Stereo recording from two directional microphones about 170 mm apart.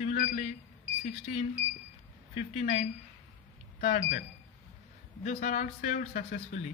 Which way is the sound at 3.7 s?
55° left (ahead or behind).